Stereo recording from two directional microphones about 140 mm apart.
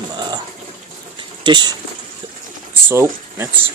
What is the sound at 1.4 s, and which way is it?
Speech, 35° right (ahead or behind).